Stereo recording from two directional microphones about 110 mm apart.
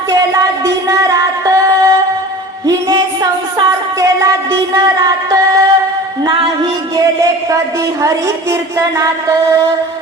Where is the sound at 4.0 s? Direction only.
30° right (ahead or behind).